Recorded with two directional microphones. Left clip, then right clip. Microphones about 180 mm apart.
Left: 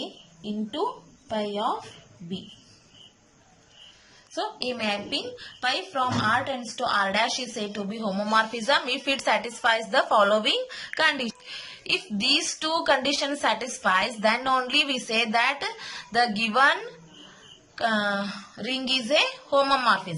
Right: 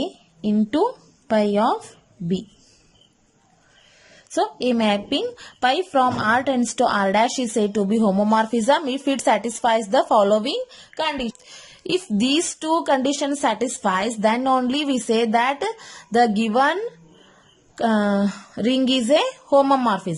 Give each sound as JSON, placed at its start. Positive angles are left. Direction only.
{"t": 1.3, "sound": "speech", "side_deg": -60}
{"t": 4.4, "sound": "a woman's voice", "side_deg": -55}
{"t": 11.4, "sound": "a woman's voice", "side_deg": -35}
{"t": 17.7, "sound": "a woman's voice", "side_deg": -45}